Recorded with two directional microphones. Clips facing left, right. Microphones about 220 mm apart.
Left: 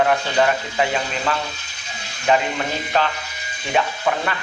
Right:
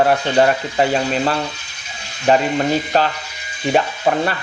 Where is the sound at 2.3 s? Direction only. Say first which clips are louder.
Right 5 dB; 40° right (ahead or behind).